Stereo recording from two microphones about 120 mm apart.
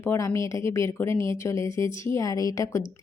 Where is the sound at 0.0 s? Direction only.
20° left (ahead or behind).